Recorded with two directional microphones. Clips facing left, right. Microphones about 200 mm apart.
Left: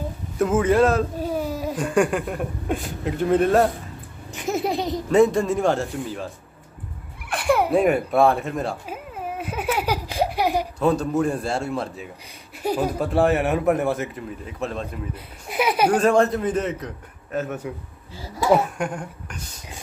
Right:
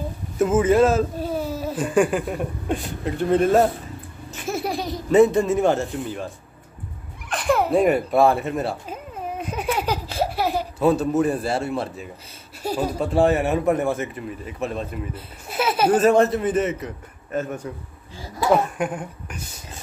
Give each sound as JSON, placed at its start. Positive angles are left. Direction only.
{"t": 0.4, "sound": "speech", "side_deg": 0}
{"t": 1.2, "sound": "baby cry", "side_deg": 15}
{"t": 1.8, "sound": "speech", "side_deg": 0}
{"t": 4.3, "sound": "laughter", "side_deg": 15}
{"t": 5.1, "sound": "speech", "side_deg": 0}
{"t": 7.2, "sound": "a sound", "side_deg": 10}
{"t": 7.8, "sound": "speech", "side_deg": 0}
{"t": 8.8, "sound": "baby laughter", "side_deg": 5}
{"t": 10.8, "sound": "speech", "side_deg": -5}
{"t": 12.6, "sound": "speech", "side_deg": 15}
{"t": 13.0, "sound": "speech", "side_deg": 0}
{"t": 15.1, "sound": "speech", "side_deg": 15}
{"t": 15.9, "sound": "speech", "side_deg": -5}
{"t": 18.8, "sound": "speech", "side_deg": -5}